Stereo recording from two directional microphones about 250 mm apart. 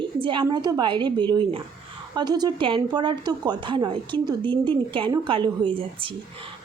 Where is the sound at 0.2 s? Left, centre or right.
Centre.